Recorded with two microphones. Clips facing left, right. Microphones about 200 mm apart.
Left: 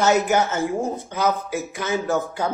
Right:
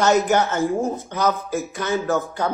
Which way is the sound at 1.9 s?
15° left (ahead or behind).